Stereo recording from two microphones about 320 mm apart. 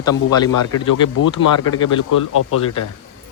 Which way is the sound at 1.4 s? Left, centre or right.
Left.